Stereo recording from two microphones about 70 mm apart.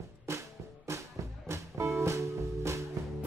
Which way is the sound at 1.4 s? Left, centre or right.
Right.